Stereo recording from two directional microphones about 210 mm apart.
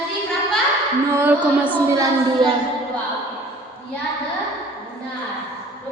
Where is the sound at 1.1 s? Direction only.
10° right (ahead or behind).